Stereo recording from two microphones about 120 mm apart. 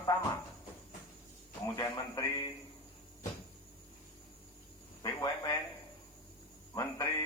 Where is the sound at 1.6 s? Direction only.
30° left (ahead or behind).